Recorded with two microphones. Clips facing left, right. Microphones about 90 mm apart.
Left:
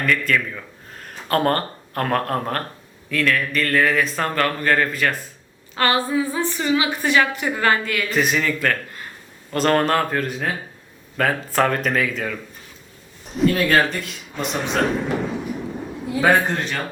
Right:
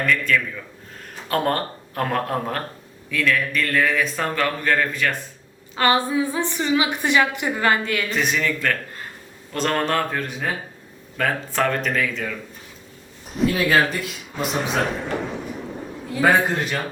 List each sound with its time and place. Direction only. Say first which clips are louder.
0.0 s speech: even; centre (ahead or behind)
5.7 s a woman's voice: even; 20° right (ahead or behind)
8.1 s speech: left 4 dB; 5° left (ahead or behind)
13.3 s a man's voice: left 1 dB; centre (ahead or behind)